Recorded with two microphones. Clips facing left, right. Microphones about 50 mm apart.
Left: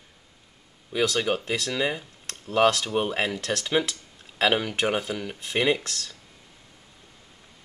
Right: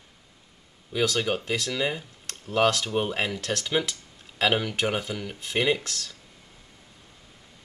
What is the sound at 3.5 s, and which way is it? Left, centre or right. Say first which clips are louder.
Speech: left 1 dB; left.